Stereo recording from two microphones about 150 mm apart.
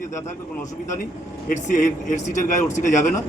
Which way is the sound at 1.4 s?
55° left (ahead or behind).